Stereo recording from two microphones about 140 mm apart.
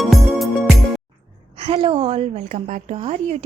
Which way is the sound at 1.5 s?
50° right (ahead or behind).